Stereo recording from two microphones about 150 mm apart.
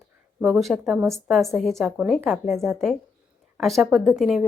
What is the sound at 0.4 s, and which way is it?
A woman's voice, centre (ahead or behind).